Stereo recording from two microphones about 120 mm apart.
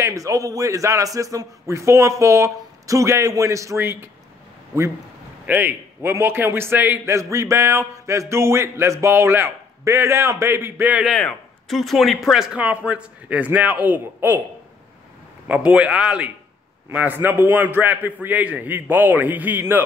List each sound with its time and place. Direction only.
0.0 s a man's voice: 30° right (ahead or behind)
5.5 s a man's voice: 15° right (ahead or behind)
11.1 s a man's voice: 5° left (ahead or behind); by 14.4 s 15° right (ahead or behind)
15.4 s a man's voice: 10° right (ahead or behind)